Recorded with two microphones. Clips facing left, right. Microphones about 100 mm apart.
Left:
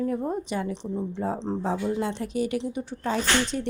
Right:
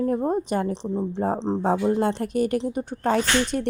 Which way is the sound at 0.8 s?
30° right (ahead or behind).